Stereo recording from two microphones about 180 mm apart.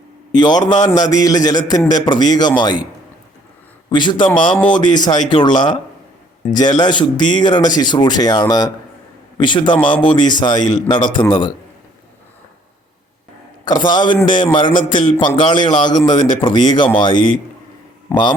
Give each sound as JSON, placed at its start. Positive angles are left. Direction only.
{"t": 0.3, "sound": "speech", "side_deg": 25}
{"t": 3.8, "sound": "speech", "side_deg": 25}
{"t": 13.7, "sound": "speech", "side_deg": 25}